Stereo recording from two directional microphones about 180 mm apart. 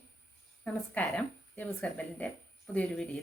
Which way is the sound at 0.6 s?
10° left (ahead or behind).